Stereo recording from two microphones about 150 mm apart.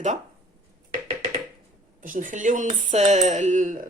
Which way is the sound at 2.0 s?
60° right (ahead or behind).